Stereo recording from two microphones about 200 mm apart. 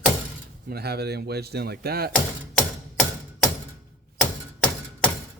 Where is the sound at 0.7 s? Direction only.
55° right (ahead or behind).